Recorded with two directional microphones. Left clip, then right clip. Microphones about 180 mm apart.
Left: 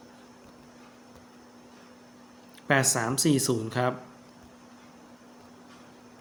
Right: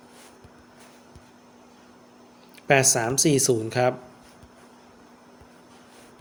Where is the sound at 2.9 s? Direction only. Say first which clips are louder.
Right 4 dB; 35° right (ahead or behind).